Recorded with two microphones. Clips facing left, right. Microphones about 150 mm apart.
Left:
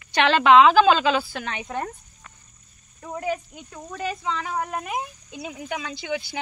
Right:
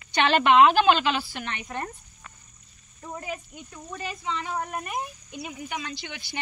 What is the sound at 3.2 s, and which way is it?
A woman's voice, 90° left.